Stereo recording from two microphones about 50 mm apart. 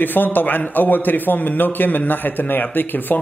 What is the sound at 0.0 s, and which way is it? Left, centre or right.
A man's voice, left.